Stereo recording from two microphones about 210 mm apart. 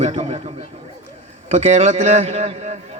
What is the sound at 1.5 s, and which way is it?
A man's voice, 35° right (ahead or behind).